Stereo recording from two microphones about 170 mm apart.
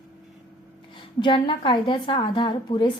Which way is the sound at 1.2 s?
30° left (ahead or behind).